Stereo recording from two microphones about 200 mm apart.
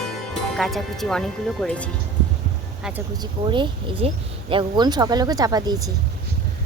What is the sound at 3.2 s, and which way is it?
Speech, 25° right (ahead or behind).